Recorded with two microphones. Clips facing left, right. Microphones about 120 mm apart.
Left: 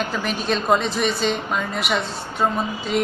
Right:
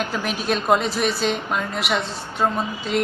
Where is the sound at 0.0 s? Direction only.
5° right (ahead or behind).